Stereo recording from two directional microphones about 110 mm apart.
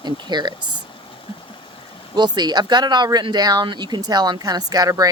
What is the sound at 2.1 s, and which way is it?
Speech, 40° right (ahead or behind).